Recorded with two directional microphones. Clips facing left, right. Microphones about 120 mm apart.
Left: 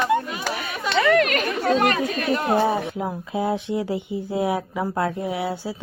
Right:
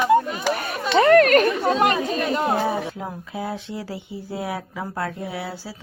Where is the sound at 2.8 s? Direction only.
15° left (ahead or behind).